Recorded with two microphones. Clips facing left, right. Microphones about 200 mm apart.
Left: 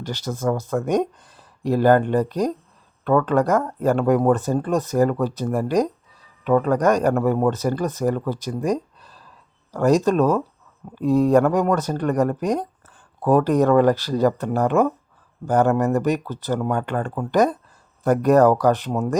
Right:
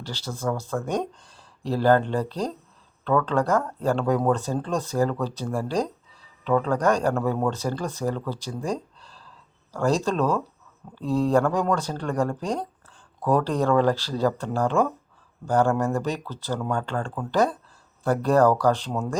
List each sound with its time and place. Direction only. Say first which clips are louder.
0.0 s speech: left 5 dB; 15° left (ahead or behind)
15.7 s speech: left 5 dB; 5° left (ahead or behind)